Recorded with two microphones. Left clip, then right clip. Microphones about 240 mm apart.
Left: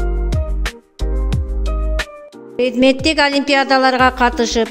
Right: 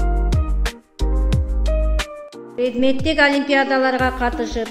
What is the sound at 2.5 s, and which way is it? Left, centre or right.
A woman's voice, left.